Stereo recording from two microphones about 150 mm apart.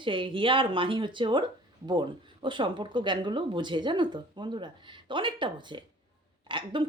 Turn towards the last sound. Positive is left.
turn(degrees=-35)  # may be behind; listen again after turning